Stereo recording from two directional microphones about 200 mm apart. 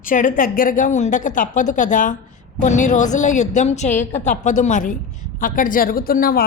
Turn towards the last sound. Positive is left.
turn(degrees=45)  # may be behind; listen again after turning